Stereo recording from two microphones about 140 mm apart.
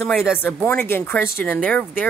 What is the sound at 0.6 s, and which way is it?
Speech, 15° left (ahead or behind).